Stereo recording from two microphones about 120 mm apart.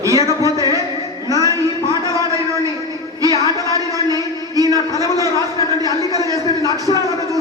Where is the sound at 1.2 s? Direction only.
30° right (ahead or behind).